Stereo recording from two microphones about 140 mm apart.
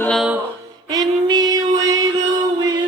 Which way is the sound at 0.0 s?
5° left (ahead or behind).